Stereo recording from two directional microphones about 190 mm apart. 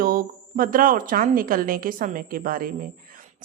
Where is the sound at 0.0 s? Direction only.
50° right (ahead or behind).